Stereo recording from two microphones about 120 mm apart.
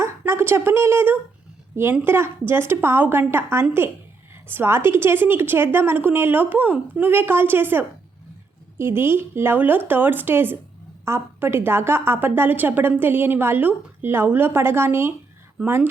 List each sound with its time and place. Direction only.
0.0 s a woman's voice: 20° right (ahead or behind)